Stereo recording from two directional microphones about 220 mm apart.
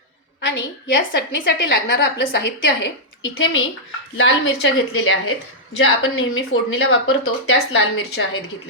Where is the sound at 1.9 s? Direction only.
50° left (ahead or behind).